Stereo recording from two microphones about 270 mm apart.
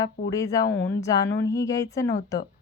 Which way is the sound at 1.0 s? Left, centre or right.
Centre.